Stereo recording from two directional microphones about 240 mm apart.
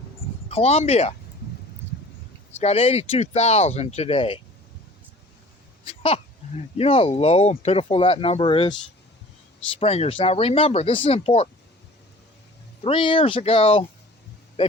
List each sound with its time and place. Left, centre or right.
0.4 s speech: left
2.6 s speech: left
5.8 s a sound: left
6.7 s speech: left
9.7 s speech: left
12.8 s speech: left